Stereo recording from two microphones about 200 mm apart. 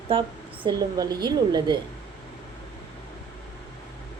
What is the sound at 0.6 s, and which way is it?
A woman's voice, 20° right (ahead or behind).